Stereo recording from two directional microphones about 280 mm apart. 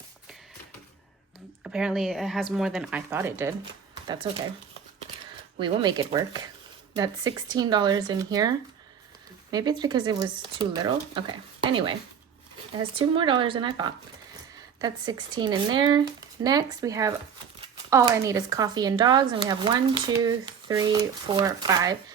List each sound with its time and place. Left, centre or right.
1.6 s speech: centre
5.5 s speech: centre